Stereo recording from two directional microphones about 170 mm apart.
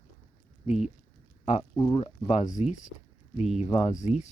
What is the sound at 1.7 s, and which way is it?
Speech, 25° left (ahead or behind).